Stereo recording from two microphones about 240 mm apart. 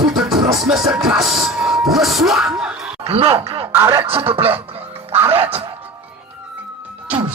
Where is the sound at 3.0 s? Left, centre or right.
Right.